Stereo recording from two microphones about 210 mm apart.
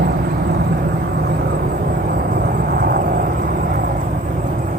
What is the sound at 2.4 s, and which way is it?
Vehicle, 45° right (ahead or behind).